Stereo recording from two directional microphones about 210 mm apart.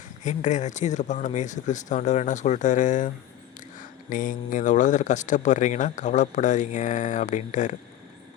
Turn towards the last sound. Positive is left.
turn(degrees=35)  # may be behind; listen again after turning